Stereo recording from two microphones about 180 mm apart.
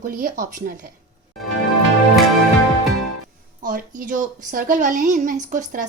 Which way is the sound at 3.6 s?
50° right (ahead or behind).